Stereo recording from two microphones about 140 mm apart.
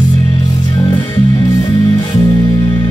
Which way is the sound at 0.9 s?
30° left (ahead or behind).